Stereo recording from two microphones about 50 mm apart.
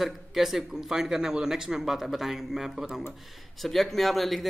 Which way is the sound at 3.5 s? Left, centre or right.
Centre.